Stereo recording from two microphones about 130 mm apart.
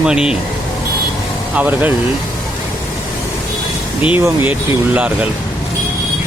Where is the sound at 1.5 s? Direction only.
15° right (ahead or behind).